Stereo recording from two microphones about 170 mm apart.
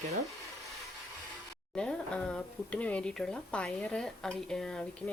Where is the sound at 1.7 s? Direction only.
5° left (ahead or behind).